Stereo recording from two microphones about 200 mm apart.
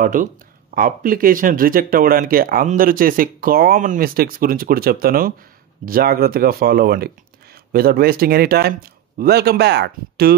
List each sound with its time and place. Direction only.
0.0 s speech: 40° right (ahead or behind)